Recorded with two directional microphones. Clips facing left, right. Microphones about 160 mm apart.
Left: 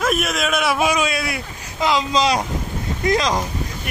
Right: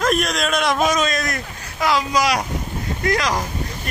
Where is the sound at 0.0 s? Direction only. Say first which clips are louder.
Right 1 dB; 5° left (ahead or behind).